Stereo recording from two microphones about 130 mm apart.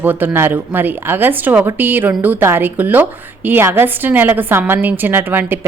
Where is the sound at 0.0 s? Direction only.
15° right (ahead or behind).